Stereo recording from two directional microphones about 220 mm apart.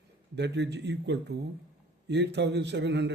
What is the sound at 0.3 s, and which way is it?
Speech, 50° right (ahead or behind).